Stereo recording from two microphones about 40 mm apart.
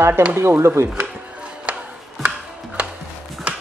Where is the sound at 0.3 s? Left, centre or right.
Right.